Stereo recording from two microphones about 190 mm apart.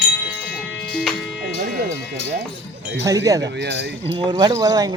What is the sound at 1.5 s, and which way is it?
Speech, 50° right (ahead or behind).